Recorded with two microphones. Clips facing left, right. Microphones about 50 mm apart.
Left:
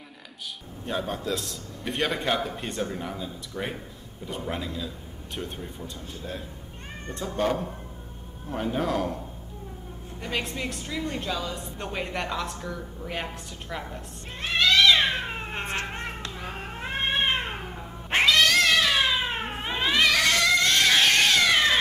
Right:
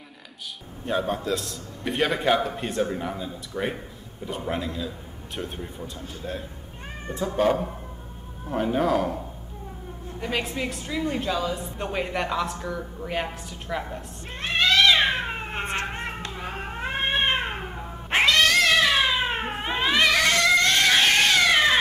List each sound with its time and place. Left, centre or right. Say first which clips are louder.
0.8 s a woman's voice: right 4 dB; centre
10.2 s a woman's voice: right 3 dB; centre
14.6 s cat: right 1 dB; centre
15.6 s cat: right 3 dB; right
15.9 s cat: right 2 dB; centre